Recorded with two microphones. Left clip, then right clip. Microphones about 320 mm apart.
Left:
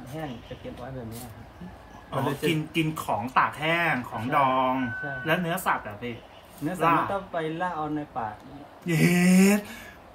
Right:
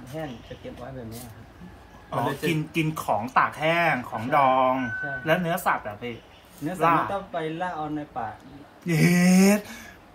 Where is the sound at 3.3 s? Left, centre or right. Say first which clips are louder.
Right 1 dB; centre.